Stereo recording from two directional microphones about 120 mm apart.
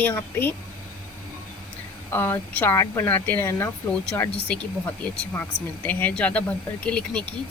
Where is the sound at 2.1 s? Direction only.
15° left (ahead or behind).